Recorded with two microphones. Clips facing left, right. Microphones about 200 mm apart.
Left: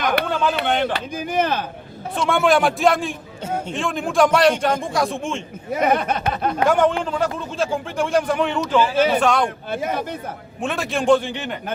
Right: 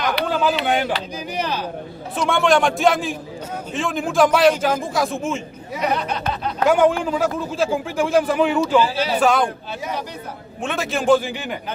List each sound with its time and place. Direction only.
0.0 s speech: 55° left (ahead or behind)
0.3 s a man's voice: 5° right (ahead or behind)
0.9 s speech: 50° left (ahead or behind)
2.1 s a man's voice: centre (ahead or behind)
5.7 s speech: 50° left (ahead or behind)
6.7 s a man's voice: 5° right (ahead or behind)
9.6 s speech: 55° left (ahead or behind)
10.6 s a man's voice: centre (ahead or behind)